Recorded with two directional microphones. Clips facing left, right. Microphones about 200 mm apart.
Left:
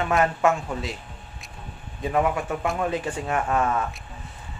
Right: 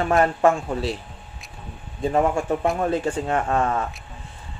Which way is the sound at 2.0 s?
30° right (ahead or behind).